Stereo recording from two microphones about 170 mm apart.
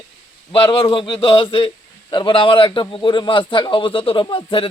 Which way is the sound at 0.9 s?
30° left (ahead or behind).